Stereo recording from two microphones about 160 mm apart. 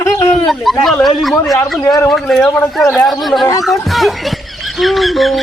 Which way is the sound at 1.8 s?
15° left (ahead or behind).